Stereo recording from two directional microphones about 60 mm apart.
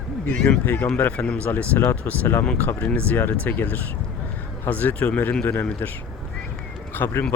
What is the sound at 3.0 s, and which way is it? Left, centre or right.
Speech, left.